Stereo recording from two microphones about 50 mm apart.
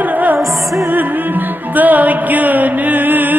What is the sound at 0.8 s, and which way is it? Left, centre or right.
Music, right.